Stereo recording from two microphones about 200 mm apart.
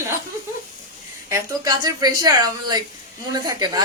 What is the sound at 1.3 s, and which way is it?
A woman's voice, 20° right (ahead or behind).